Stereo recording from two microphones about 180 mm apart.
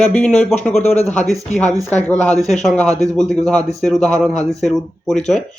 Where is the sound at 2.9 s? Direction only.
20° right (ahead or behind).